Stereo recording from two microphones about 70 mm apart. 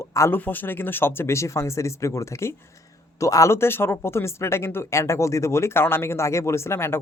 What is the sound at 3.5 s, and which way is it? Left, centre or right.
Speech, left.